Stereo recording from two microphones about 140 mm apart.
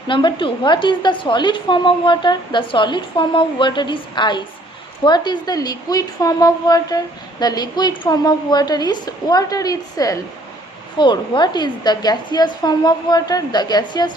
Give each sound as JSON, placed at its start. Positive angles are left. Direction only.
{"t": 0.1, "sound": "a woman's voice", "side_deg": 35}